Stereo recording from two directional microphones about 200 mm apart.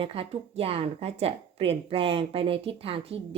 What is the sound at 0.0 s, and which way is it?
A woman's voice, 30° right (ahead or behind).